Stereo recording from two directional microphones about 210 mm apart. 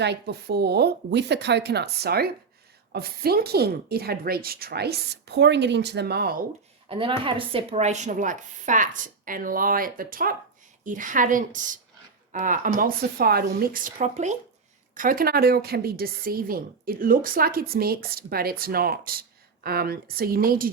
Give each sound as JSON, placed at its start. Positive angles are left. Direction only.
{"t": 0.0, "sound": "a woman's voice", "side_deg": -50}
{"t": 6.8, "sound": "a woman's voice", "side_deg": -25}